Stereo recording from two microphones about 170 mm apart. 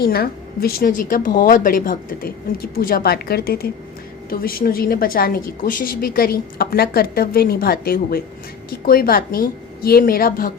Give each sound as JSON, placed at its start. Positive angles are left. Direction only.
{"t": 0.0, "sound": "a woman's voice", "side_deg": 65}